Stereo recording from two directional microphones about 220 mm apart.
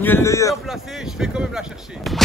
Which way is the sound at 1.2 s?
5° right (ahead or behind).